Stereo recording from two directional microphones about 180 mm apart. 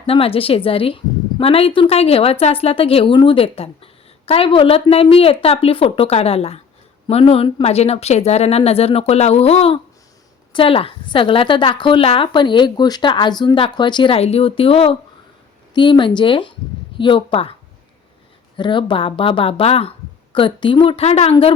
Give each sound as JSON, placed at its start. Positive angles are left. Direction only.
{"t": 0.0, "sound": "a woman's voice", "side_deg": 30}
{"t": 18.5, "sound": "a woman's voice", "side_deg": 25}